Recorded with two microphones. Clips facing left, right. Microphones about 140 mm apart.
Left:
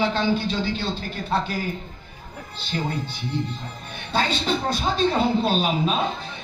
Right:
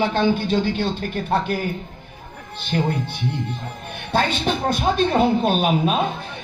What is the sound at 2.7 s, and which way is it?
Speech, 60° right (ahead or behind).